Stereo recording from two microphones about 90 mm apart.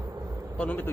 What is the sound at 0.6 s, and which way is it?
Speech, 20° left (ahead or behind).